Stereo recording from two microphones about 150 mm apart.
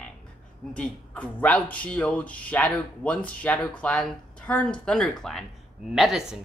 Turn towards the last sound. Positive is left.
turn(degrees=0)  # may be behind; listen again after turning